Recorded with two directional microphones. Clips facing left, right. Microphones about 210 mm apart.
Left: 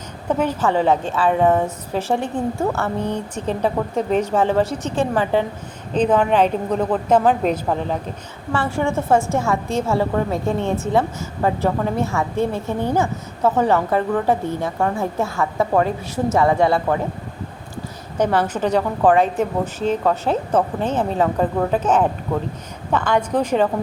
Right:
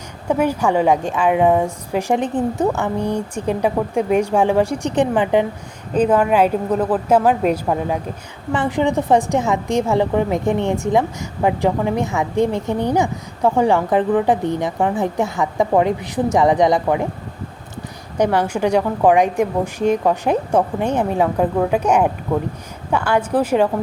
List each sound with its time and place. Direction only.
0.3 s a woman's voice: 10° right (ahead or behind)
18.2 s a woman's voice: 10° right (ahead or behind)